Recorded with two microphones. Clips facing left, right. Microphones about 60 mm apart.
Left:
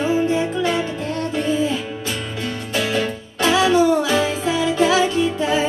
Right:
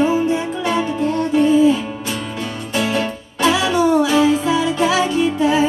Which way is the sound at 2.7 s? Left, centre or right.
Right.